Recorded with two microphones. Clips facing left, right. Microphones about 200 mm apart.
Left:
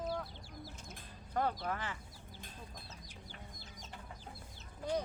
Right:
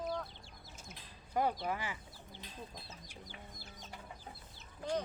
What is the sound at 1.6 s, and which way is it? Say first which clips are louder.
Speech: right 1 dB; 10° right (ahead or behind).